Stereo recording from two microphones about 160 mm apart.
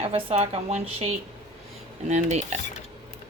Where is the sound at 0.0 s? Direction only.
40° right (ahead or behind).